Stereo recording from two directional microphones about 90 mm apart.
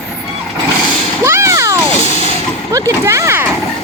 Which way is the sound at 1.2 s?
30° right (ahead or behind).